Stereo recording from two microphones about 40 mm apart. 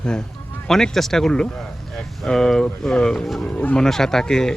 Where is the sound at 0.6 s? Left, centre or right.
Centre.